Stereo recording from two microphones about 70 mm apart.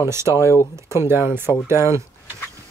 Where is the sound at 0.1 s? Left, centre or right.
Right.